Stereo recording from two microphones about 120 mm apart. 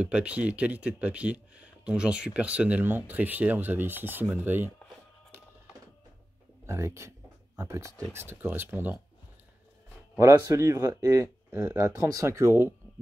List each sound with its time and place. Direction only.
0.0 s speech: 10° right (ahead or behind)
6.6 s speech: 25° right (ahead or behind)
10.1 s speech: 25° right (ahead or behind)